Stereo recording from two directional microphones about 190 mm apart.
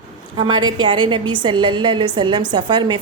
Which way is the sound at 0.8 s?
25° right (ahead or behind).